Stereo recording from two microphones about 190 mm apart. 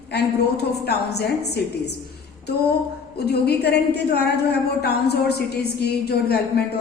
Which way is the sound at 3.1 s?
60° left (ahead or behind).